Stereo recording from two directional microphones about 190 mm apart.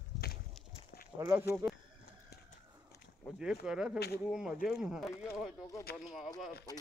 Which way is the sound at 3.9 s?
60° left (ahead or behind).